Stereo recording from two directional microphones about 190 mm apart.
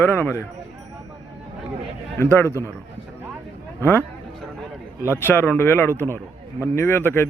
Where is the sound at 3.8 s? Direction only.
10° left (ahead or behind).